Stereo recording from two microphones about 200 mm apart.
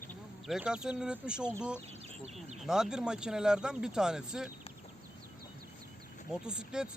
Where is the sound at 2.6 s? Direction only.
5° right (ahead or behind).